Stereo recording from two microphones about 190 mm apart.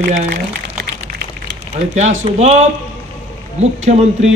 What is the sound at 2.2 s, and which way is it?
Speech, 35° right (ahead or behind).